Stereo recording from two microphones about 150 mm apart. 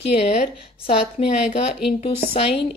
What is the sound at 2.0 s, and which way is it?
Speech, 35° left (ahead or behind).